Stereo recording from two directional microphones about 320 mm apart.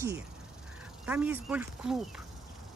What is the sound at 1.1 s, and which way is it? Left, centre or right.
Speech, centre.